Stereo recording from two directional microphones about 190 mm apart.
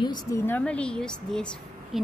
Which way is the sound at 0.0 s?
20° left (ahead or behind).